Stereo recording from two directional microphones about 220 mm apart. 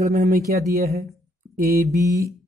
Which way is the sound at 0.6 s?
45° right (ahead or behind).